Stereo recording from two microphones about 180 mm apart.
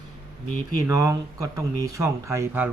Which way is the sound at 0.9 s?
20° right (ahead or behind).